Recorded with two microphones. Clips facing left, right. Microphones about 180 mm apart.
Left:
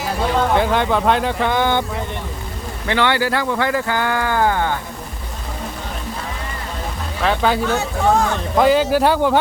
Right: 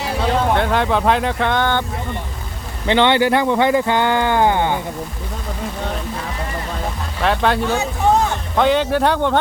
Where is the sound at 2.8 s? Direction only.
20° right (ahead or behind).